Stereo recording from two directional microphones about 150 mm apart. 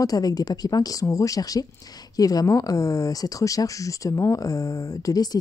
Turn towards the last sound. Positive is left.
turn(degrees=25)  # may be behind; listen again after turning